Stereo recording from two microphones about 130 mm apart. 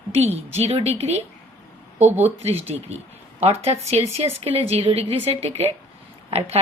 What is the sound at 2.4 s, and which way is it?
A woman's voice, 55° right (ahead or behind).